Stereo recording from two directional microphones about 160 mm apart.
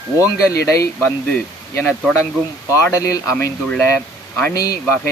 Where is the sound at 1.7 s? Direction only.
10° left (ahead or behind).